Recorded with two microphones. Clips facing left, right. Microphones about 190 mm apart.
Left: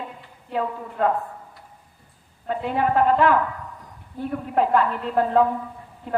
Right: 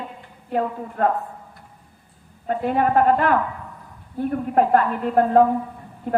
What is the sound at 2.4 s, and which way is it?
Speech, 50° right (ahead or behind).